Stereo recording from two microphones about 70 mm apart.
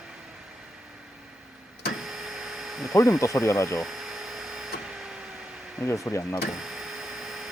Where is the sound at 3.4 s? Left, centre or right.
Left.